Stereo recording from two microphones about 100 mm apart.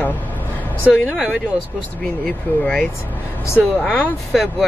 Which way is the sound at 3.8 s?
10° left (ahead or behind).